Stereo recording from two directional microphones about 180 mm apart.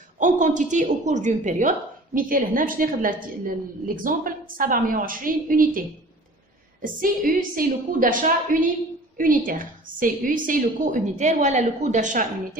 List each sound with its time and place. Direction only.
0.2 s a woman's voice: 45° right (ahead or behind)